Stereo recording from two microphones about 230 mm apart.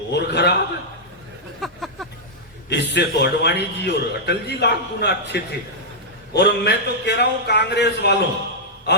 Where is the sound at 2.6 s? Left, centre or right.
Left.